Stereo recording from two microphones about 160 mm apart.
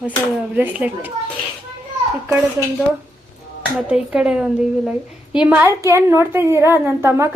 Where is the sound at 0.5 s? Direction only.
10° right (ahead or behind).